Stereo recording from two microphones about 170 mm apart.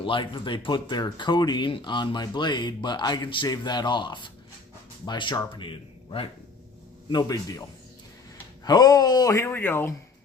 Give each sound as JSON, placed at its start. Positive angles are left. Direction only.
{"t": 0.0, "sound": "speech", "side_deg": 30}
{"t": 8.6, "sound": "speech", "side_deg": 25}